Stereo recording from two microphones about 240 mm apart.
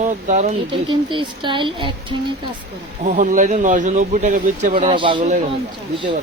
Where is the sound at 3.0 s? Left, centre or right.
Right.